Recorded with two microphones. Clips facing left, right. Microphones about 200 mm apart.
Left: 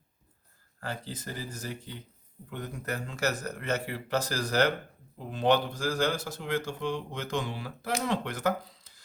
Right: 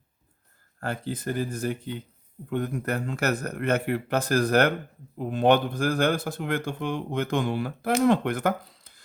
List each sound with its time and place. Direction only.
0.8 s speech: 55° right (ahead or behind)